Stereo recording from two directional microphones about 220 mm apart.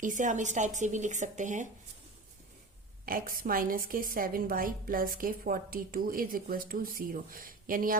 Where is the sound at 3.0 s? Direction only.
40° right (ahead or behind).